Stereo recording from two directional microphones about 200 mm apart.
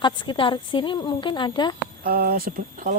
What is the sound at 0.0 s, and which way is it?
A woman's voice, 25° left (ahead or behind).